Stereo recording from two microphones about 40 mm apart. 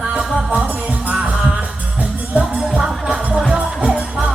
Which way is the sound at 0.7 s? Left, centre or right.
Right.